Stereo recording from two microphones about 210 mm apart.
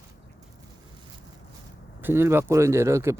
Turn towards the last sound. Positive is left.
turn(degrees=-15)  # may be behind; listen again after turning